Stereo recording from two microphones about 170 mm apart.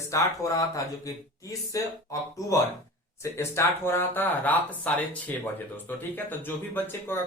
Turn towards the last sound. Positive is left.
turn(degrees=15)  # may be behind; listen again after turning